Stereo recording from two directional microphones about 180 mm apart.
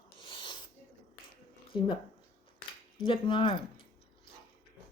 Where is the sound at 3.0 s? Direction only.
25° left (ahead or behind).